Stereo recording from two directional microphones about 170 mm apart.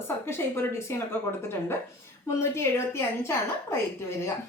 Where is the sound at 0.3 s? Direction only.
15° left (ahead or behind).